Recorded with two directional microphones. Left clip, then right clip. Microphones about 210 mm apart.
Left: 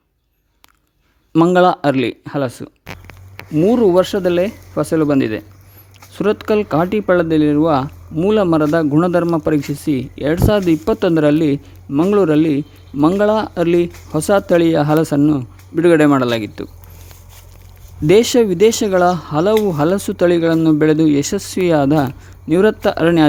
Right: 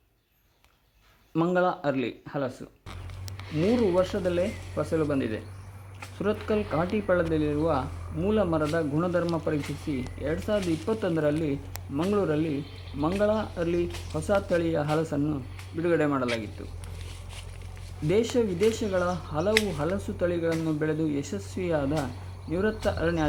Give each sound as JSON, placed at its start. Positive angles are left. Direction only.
{"t": 1.3, "sound": "speech", "side_deg": 45}
{"t": 3.6, "sound": "speech", "side_deg": 45}
{"t": 18.1, "sound": "speech", "side_deg": 50}